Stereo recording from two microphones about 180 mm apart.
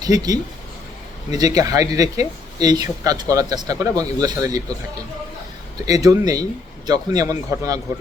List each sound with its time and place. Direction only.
0.0 s speech: 20° right (ahead or behind)
5.8 s speech: 20° right (ahead or behind)